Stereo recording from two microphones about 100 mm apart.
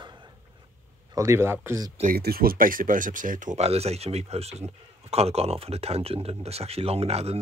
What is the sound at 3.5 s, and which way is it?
Speech, 90° right.